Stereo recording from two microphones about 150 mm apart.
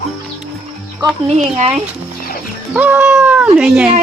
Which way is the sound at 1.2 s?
50° right (ahead or behind).